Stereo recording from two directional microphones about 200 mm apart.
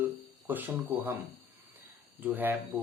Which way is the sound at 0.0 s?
10° right (ahead or behind).